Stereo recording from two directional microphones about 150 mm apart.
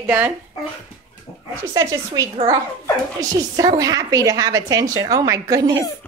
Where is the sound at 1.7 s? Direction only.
25° right (ahead or behind).